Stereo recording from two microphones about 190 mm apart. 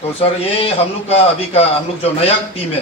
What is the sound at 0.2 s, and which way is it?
A man's voice, 30° left (ahead or behind).